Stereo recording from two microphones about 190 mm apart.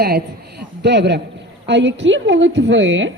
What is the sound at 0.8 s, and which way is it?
A man's voice, 65° right (ahead or behind).